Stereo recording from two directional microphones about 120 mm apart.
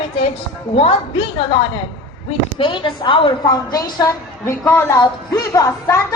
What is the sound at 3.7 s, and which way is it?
A woman's voice, 25° left (ahead or behind).